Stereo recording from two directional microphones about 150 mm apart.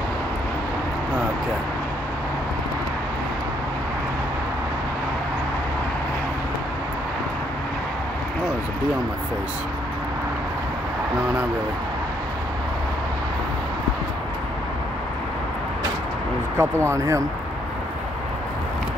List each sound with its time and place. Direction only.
16.5 s speech: 20° right (ahead or behind)